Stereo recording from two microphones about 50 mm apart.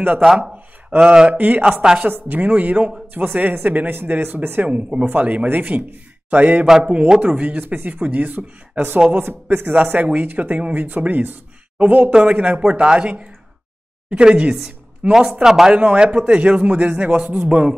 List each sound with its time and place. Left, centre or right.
0.8 s speech: centre
1.3 s speech: right
1.7 s a woman's voice: centre
2.0 s a man's voice: right
6.6 s a man's voice: centre
7.6 s speech: right
9.8 s a man's voice: right
14.1 s a woman's voice: right
15.7 s a man's voice: right